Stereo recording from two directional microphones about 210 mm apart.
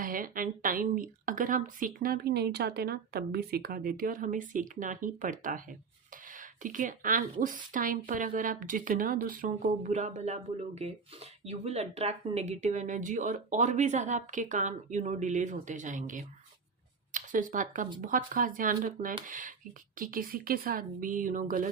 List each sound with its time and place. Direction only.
0.0 s speech: 40° right (ahead or behind)